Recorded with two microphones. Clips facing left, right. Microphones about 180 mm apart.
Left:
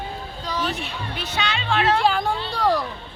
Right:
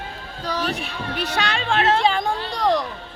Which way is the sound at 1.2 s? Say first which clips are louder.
Right 3 dB; 60° right (ahead or behind).